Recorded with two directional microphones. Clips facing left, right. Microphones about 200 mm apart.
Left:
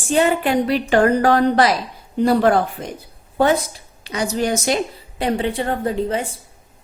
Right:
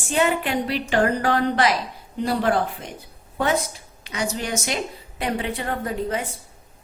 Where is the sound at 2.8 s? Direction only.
40° left (ahead or behind).